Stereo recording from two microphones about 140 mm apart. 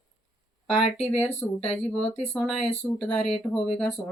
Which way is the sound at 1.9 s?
5° left (ahead or behind).